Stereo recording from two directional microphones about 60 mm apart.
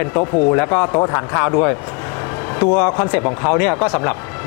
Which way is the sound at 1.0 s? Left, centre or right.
Left.